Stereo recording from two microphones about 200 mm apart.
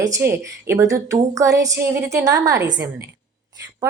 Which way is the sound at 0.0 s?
15° right (ahead or behind).